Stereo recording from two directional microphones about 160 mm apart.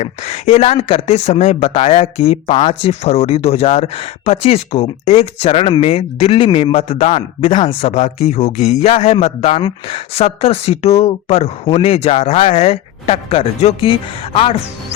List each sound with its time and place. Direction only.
0.0 s speech: 45° left (ahead or behind)